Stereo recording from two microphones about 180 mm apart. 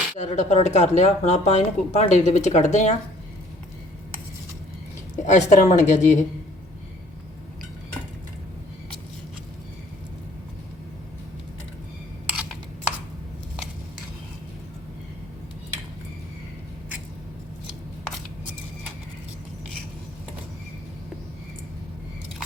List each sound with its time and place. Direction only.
0.2 s speech: 40° left (ahead or behind)
5.2 s speech: 40° left (ahead or behind)
12.3 s a sound: 5° right (ahead or behind)